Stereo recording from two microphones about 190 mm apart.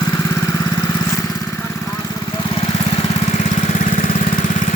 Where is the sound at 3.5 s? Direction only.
40° left (ahead or behind).